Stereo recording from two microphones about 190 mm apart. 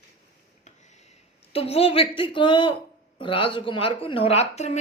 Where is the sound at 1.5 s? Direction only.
30° left (ahead or behind).